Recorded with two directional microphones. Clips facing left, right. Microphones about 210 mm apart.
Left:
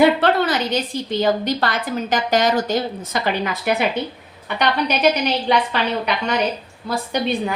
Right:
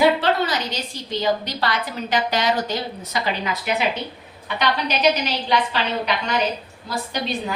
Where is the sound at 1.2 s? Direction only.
50° left (ahead or behind).